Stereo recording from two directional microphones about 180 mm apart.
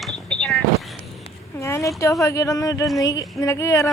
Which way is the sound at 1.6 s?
15° left (ahead or behind).